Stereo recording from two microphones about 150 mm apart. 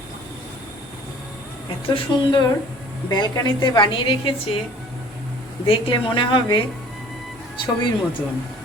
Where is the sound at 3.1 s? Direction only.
30° left (ahead or behind).